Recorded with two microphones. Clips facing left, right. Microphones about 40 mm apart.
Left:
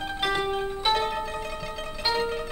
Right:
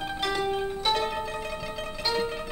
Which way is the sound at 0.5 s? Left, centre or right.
Centre.